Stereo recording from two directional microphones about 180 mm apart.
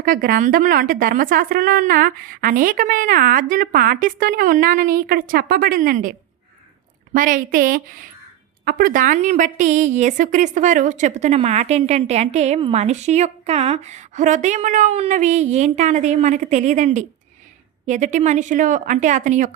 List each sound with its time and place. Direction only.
0.0 s a woman's voice: 50° right (ahead or behind)